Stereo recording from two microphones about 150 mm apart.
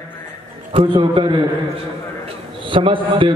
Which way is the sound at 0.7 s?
35° right (ahead or behind).